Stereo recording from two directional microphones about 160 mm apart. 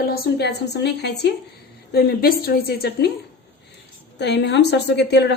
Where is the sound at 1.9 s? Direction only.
75° left (ahead or behind).